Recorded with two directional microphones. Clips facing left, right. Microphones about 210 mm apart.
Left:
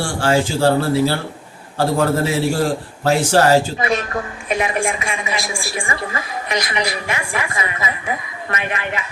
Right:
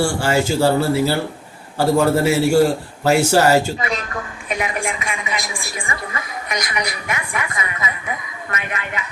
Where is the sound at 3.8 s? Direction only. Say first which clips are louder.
Left 5 dB; 30° left (ahead or behind).